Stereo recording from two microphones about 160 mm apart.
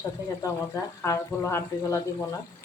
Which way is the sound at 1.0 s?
15° left (ahead or behind).